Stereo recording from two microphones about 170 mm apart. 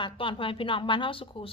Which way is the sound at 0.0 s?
30° left (ahead or behind).